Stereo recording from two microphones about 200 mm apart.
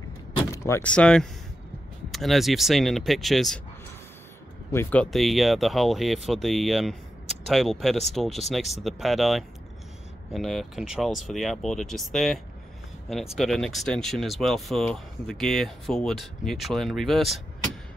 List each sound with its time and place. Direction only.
0.7 s speech: 10° left (ahead or behind)
4.7 s speech: 10° left (ahead or behind)